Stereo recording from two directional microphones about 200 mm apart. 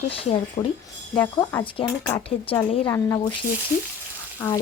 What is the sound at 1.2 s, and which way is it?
Speech, 10° left (ahead or behind).